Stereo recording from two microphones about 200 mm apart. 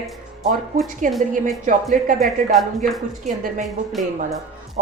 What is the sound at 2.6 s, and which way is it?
Speech, centre (ahead or behind).